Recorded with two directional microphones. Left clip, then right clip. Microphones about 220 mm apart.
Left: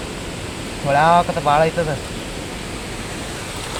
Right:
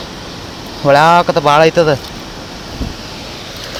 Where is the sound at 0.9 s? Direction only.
45° right (ahead or behind).